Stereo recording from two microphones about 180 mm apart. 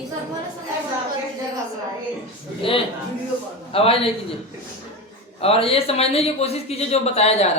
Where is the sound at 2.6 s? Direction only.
30° left (ahead or behind).